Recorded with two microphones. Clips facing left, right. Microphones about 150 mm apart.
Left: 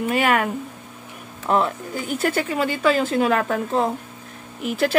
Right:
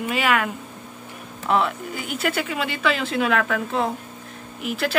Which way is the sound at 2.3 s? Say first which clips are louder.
Left 4 dB; 40° left (ahead or behind).